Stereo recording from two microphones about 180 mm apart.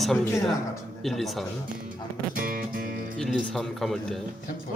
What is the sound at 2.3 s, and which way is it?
Music, 50° right (ahead or behind).